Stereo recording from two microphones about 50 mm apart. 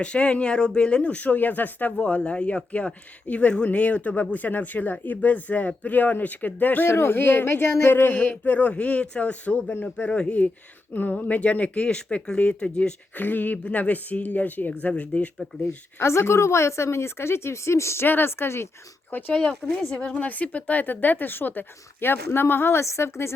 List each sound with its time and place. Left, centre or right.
0.0 s speech: left
2.0 s speech: left
6.8 s speech: left; by 12.9 s centre
13.1 s speech: left
15.6 s speech: left
18.0 s speech: left
19.3 s a woman's voice: left